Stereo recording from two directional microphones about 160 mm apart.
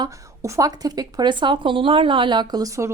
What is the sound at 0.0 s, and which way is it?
Speech, 20° right (ahead or behind).